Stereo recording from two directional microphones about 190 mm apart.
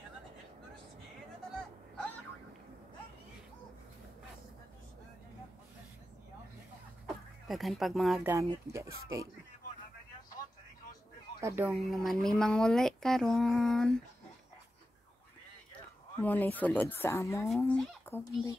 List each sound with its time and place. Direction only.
7.4 s speech: centre (ahead or behind)
8.3 s speech: 15° right (ahead or behind)
11.4 s speech: 10° right (ahead or behind)
11.7 s speech: centre (ahead or behind)
16.2 s speech: 10° left (ahead or behind)